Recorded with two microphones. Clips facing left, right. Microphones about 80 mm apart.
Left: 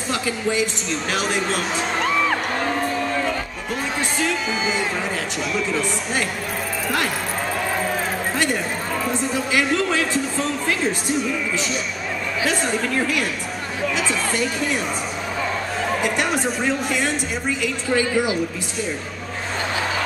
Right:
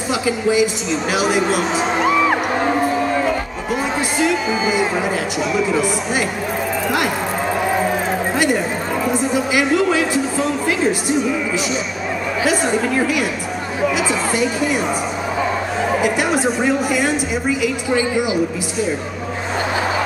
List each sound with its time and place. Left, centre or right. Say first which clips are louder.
0.1 s speech: right 5 dB; centre
1.1 s music: right 6 dB; centre
4.6 s speech: right 5 dB; centre
7.6 s vehicle: right 7 dB; centre
9.0 s speech: right 6 dB; centre
12.4 s speech: right 5 dB; centre
15.9 s a woman's voice: right 4 dB; centre
17.8 s speech: left 1 dB; centre